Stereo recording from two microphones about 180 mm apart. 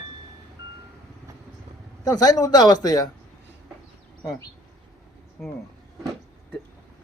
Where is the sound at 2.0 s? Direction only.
20° left (ahead or behind).